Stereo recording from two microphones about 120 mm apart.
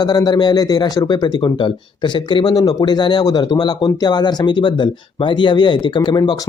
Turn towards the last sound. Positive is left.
turn(degrees=35)  # may be behind; listen again after turning